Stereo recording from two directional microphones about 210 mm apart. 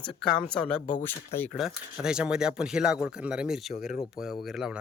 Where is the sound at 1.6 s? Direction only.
Centre (ahead or behind).